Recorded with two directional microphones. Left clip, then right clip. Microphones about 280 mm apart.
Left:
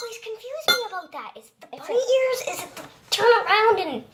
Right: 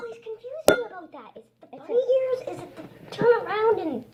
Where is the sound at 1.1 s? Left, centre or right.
Left.